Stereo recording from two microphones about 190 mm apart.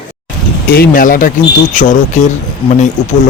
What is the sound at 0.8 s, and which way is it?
Speech, 45° left (ahead or behind).